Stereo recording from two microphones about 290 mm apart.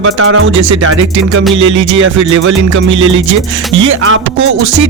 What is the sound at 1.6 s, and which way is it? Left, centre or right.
Speech, right.